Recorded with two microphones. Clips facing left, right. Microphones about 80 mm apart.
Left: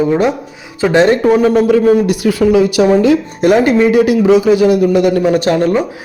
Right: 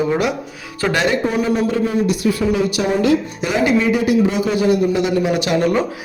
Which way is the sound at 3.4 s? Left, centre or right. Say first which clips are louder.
Left 9 dB; left.